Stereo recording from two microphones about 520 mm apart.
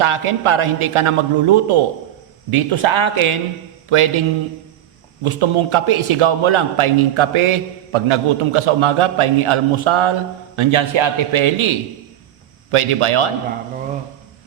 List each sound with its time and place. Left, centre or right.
0.0 s a man's voice: right
5.2 s a man's voice: right